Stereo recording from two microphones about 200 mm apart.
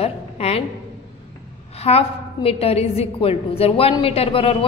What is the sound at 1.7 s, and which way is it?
A woman's voice, 30° left (ahead or behind).